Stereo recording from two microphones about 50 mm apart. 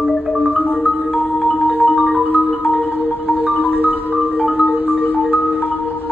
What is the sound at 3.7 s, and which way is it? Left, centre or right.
Marimba, right.